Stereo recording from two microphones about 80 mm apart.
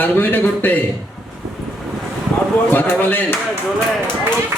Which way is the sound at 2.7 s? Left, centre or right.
Left.